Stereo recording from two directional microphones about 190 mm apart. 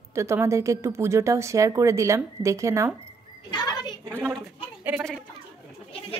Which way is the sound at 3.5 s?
20° left (ahead or behind).